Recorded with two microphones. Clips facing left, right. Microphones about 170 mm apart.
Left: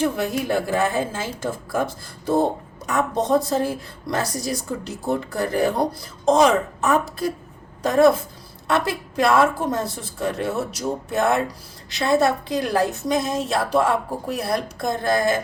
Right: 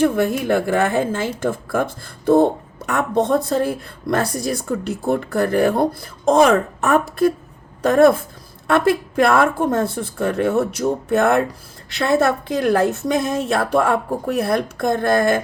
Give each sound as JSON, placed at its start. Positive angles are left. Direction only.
{"t": 0.0, "sound": "a woman's voice", "side_deg": -60}